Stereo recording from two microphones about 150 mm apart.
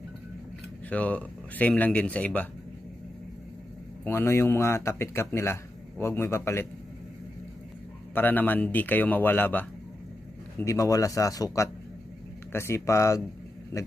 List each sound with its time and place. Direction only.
0.8 s speech: 10° left (ahead or behind)
4.0 s speech: 15° left (ahead or behind)
8.1 s a man's voice: 10° left (ahead or behind)